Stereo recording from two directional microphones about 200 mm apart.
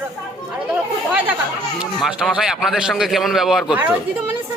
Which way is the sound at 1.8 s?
Centre (ahead or behind).